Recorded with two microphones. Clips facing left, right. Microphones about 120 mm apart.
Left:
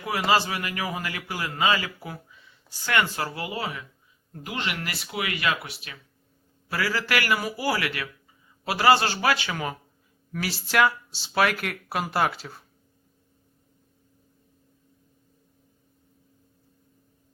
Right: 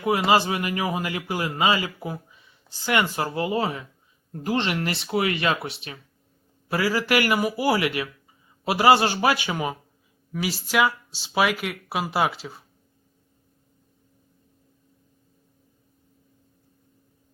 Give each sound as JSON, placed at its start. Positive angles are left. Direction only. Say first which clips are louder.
{"t": 0.0, "sound": "a man's voice", "louder": "right 4 dB", "side_deg": -25}
{"t": 10.7, "sound": "speech", "louder": "left 1 dB", "side_deg": -5}